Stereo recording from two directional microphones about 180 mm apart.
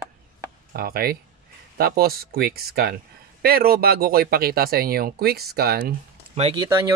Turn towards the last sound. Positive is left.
turn(degrees=-15)  # may be behind; listen again after turning